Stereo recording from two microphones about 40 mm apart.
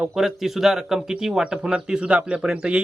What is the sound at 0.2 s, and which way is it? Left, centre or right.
Speech, centre.